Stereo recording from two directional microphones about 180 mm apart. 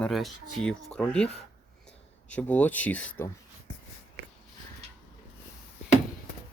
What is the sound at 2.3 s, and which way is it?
Speech, 10° left (ahead or behind).